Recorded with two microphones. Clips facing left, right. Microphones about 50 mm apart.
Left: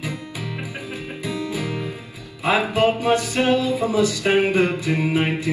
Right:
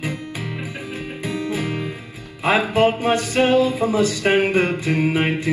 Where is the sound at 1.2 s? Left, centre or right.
Right.